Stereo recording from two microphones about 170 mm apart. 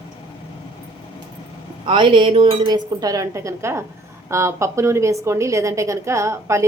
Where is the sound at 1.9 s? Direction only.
30° right (ahead or behind).